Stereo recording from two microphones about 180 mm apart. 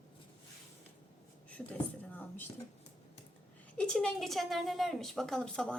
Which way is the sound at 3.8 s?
5° left (ahead or behind).